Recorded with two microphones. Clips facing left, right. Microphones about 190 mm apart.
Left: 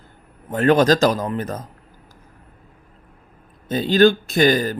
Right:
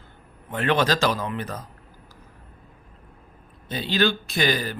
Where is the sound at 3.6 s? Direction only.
45° left (ahead or behind).